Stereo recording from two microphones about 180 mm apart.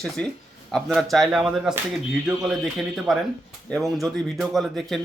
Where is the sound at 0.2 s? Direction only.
5° left (ahead or behind).